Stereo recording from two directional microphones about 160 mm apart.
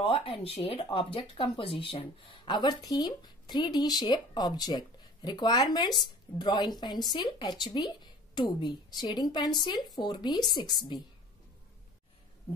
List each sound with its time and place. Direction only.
0.0 s speech: 35° left (ahead or behind)